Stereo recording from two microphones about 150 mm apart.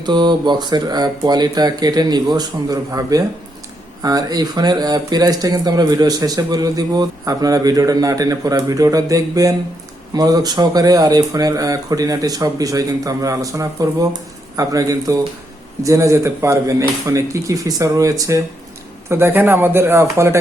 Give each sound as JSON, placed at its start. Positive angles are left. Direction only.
{"t": 0.0, "sound": "speech", "side_deg": -30}